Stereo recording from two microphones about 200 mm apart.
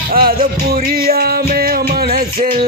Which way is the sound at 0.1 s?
45° right (ahead or behind).